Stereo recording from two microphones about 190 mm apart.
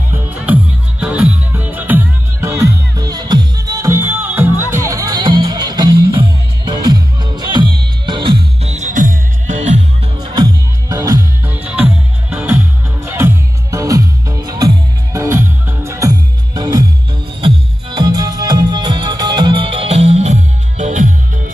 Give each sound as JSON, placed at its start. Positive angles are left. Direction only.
{"t": 0.1, "sound": "music", "side_deg": -5}
{"t": 10.3, "sound": "music", "side_deg": -20}